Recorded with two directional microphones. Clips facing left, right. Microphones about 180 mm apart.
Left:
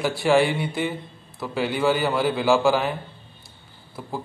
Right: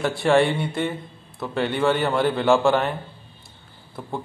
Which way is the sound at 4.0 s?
Centre (ahead or behind).